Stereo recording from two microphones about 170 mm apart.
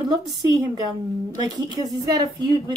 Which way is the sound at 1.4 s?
25° right (ahead or behind).